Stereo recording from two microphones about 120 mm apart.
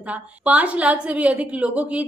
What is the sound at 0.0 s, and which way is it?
A woman's voice, 10° right (ahead or behind).